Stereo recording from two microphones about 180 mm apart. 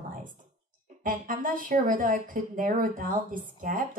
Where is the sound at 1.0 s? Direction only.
50° right (ahead or behind).